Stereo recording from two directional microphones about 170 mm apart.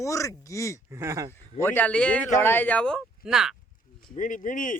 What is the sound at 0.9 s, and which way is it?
Speech, 15° right (ahead or behind).